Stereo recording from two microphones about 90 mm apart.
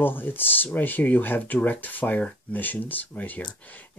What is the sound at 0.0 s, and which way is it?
Speech, 20° left (ahead or behind).